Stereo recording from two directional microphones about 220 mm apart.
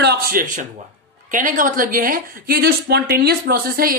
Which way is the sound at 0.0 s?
45° right (ahead or behind).